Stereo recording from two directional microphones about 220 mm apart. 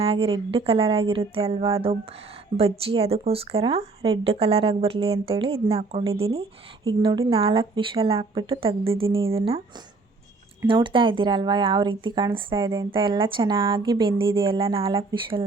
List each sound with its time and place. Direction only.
0.0 s speech: 25° right (ahead or behind)
10.7 s speech: 20° right (ahead or behind)